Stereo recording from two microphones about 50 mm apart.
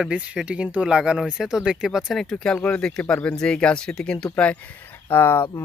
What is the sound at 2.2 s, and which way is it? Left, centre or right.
Speech, centre.